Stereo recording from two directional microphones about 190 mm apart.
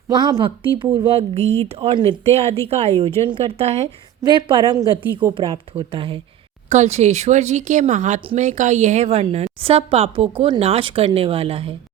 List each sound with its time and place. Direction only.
0.1 s a woman's voice: 20° right (ahead or behind)